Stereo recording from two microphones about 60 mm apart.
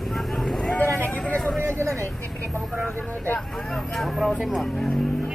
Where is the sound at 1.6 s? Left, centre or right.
Right.